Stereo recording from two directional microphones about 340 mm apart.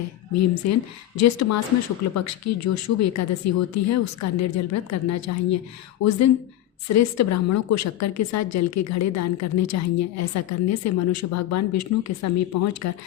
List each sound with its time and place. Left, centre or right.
0.3 s a woman's voice: left